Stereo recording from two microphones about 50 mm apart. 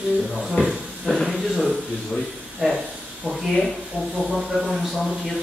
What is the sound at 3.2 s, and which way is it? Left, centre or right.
Speech, right.